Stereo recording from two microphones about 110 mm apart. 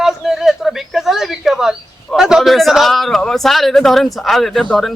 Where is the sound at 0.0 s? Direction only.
5° right (ahead or behind).